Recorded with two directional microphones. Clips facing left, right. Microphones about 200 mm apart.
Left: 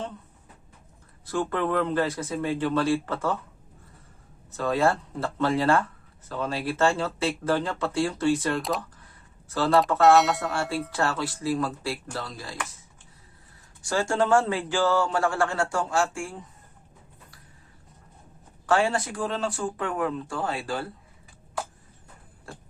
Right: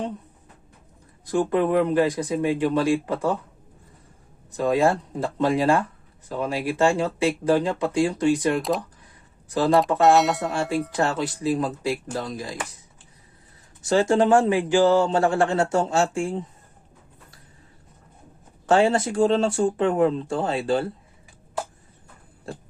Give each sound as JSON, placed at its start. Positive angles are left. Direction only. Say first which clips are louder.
{"t": 1.2, "sound": "speech", "louder": "right 6 dB", "side_deg": -15}
{"t": 4.5, "sound": "speech", "louder": "right 4 dB", "side_deg": -15}
{"t": 10.2, "sound": "speech", "louder": "right 1 dB", "side_deg": 0}
{"t": 10.5, "sound": "speech", "louder": "right 4 dB", "side_deg": -15}
{"t": 13.8, "sound": "a man's voice", "louder": "right 6 dB", "side_deg": -20}
{"t": 18.6, "sound": "a man's voice", "louder": "right 5 dB", "side_deg": -25}